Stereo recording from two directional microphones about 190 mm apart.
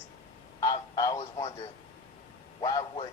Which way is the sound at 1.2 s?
30° left (ahead or behind).